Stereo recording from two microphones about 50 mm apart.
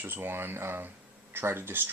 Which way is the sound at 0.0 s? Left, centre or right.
Right.